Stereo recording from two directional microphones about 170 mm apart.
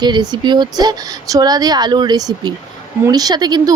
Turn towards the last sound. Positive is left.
turn(degrees=-25)  # may be behind; listen again after turning